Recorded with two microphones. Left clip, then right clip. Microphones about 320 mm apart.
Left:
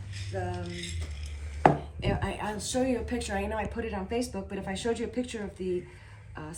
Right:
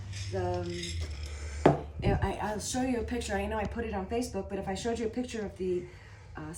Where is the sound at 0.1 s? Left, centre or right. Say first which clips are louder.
Right 2 dB; centre.